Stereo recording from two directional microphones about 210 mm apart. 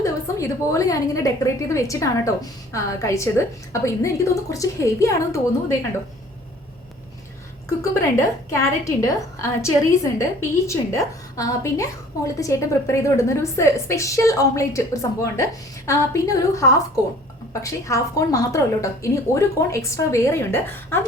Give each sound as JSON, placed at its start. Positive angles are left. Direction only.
{"t": 0.0, "sound": "a woman's voice", "side_deg": 15}
{"t": 7.7, "sound": "a woman's voice", "side_deg": 15}